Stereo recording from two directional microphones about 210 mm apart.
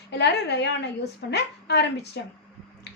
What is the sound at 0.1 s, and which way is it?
Speech, 55° left (ahead or behind).